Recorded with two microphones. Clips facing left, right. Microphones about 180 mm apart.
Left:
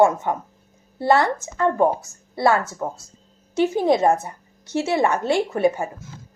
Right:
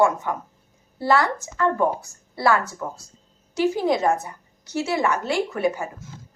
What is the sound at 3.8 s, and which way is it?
A woman's voice, 25° left (ahead or behind).